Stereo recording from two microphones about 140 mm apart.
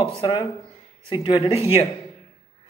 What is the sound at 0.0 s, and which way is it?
Speech, 40° left (ahead or behind).